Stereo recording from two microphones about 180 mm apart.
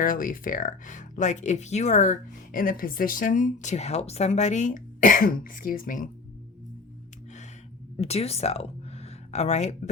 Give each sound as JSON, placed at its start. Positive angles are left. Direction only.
{"t": 0.0, "sound": "speech", "side_deg": 50}
{"t": 7.9, "sound": "speech", "side_deg": 35}